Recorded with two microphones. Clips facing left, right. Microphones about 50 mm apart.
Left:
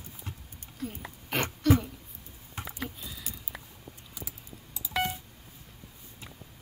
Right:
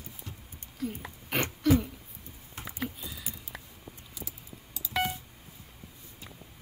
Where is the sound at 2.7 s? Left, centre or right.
Centre.